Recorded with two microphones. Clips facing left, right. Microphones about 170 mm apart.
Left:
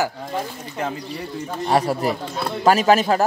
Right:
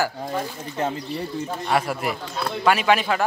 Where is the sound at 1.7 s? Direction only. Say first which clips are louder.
Left 5 dB; 35° left (ahead or behind).